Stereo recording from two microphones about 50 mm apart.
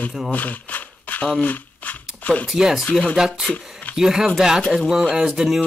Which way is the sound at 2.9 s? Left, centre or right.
Left.